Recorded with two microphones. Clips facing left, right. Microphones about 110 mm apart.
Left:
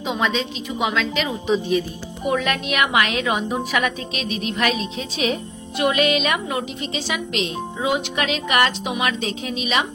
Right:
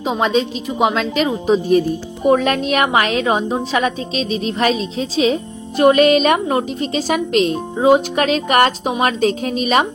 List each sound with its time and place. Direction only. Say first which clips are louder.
0.0 s a woman's voice: right 6 dB; 40° right (ahead or behind)